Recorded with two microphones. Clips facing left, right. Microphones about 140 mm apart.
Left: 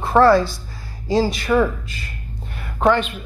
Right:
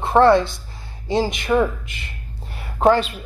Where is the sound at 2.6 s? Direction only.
35° right (ahead or behind).